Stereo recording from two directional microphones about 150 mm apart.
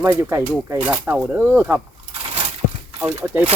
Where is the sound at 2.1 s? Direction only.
40° right (ahead or behind).